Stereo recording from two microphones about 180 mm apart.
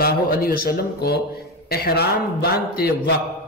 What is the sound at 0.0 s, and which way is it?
A man's voice, 55° left (ahead or behind).